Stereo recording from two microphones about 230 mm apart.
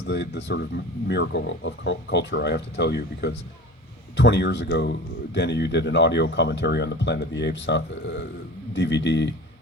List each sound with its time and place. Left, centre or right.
0.0 s a man's voice: left